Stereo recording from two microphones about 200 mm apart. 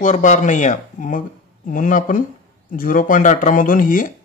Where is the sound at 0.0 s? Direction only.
40° left (ahead or behind).